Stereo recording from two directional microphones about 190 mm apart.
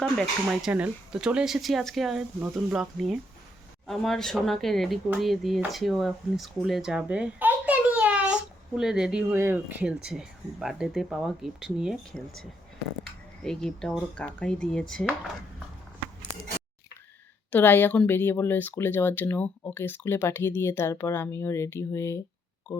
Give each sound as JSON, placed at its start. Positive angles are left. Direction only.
{"t": 0.0, "sound": "speech", "side_deg": 0}
{"t": 17.5, "sound": "speech", "side_deg": 10}